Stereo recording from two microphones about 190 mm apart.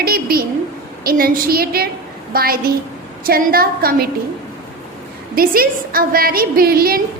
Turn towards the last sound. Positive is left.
turn(degrees=-50)  # may be behind; listen again after turning